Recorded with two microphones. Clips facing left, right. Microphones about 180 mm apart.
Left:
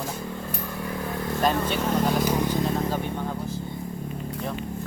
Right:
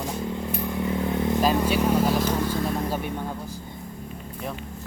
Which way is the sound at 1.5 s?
10° right (ahead or behind).